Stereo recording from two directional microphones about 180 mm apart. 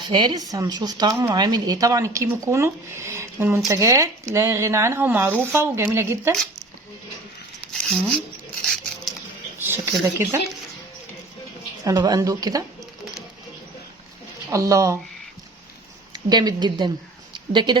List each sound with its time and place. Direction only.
0.0 s speech: 25° right (ahead or behind)
7.7 s a sound: 5° left (ahead or behind)
9.6 s speech: 15° right (ahead or behind)
11.8 s speech: 20° right (ahead or behind)
14.5 s speech: 20° right (ahead or behind)
16.1 s speech: 25° right (ahead or behind)
17.3 s a sound: 25° right (ahead or behind)